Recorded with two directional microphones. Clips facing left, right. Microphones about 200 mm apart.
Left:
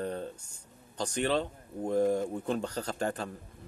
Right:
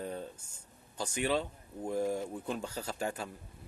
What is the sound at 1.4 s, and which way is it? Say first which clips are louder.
Speech: left 4 dB; 30° left (ahead or behind).